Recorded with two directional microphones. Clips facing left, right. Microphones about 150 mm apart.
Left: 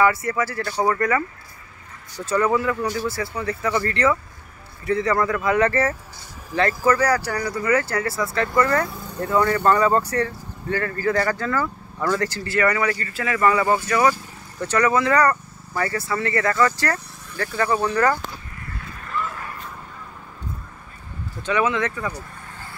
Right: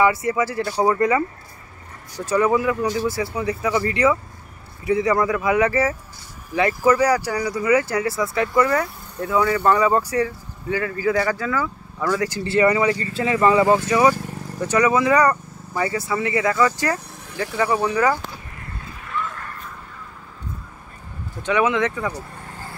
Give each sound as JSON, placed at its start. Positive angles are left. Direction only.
{"t": 0.0, "sound": "speech", "side_deg": -20}
{"t": 2.2, "sound": "speech", "side_deg": -15}
{"t": 12.4, "sound": "speech", "side_deg": -25}
{"t": 19.0, "sound": "a sound", "side_deg": 5}
{"t": 21.4, "sound": "speech", "side_deg": -15}